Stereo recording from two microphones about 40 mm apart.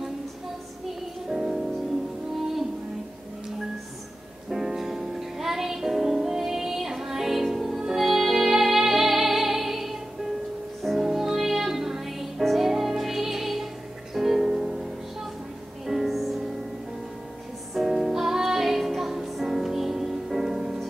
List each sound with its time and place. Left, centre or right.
1.3 s music: centre
4.5 s music: centre
11.0 s music: centre
17.7 s music: centre